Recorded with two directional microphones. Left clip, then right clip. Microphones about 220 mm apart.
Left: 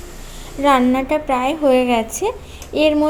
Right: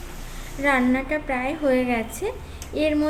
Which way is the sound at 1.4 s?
25° left (ahead or behind).